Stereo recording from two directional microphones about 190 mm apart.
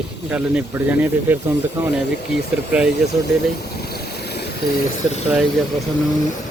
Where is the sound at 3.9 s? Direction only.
60° left (ahead or behind).